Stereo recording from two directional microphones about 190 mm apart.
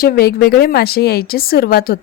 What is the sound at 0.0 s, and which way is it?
A woman's voice, 55° left (ahead or behind).